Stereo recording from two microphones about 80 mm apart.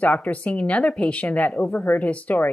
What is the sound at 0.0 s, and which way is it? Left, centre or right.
A woman's voice, centre.